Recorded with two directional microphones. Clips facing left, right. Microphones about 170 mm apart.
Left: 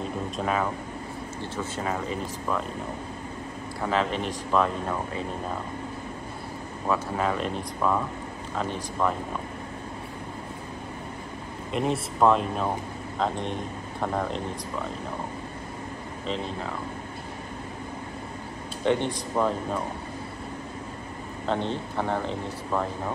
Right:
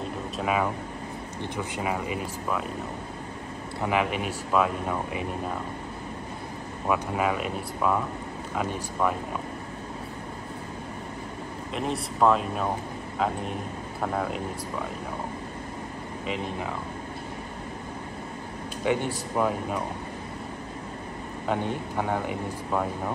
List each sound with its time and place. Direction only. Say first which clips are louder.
0.0 s a sound: left 1 dB; 5° right (ahead or behind)
1.4 s speech: right 1 dB; 15° right (ahead or behind)
3.8 s speech: even; 10° right (ahead or behind)
6.9 s speech: right 1 dB; 10° right (ahead or behind)
11.7 s speech: left 4 dB; centre (ahead or behind)
18.9 s speech: left 2 dB; 10° right (ahead or behind)
21.5 s speech: even; 10° right (ahead or behind)